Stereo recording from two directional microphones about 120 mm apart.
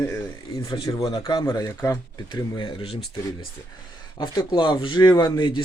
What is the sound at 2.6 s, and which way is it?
Speech, 45° left (ahead or behind).